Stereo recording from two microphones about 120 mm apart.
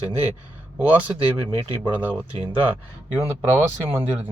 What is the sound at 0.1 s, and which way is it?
Speech, 55° right (ahead or behind).